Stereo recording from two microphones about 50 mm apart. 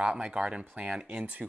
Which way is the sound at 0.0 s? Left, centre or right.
Right.